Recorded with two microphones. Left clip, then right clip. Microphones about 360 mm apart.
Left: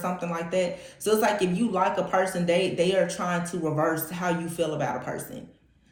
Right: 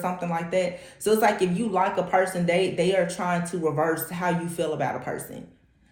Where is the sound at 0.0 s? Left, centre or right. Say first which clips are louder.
Right 2 dB; right.